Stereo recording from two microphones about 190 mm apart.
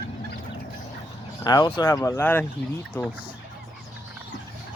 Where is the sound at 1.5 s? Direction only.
20° left (ahead or behind).